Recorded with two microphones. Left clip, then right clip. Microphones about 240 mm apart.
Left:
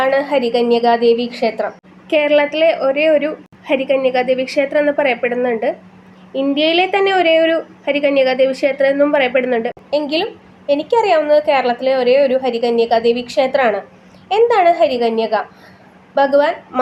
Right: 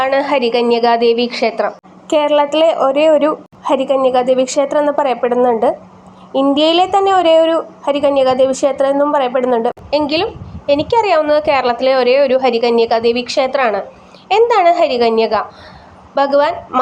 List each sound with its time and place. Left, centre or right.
0.0 s a woman's voice: centre